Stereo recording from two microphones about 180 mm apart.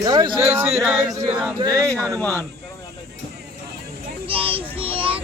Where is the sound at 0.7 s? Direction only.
5° right (ahead or behind).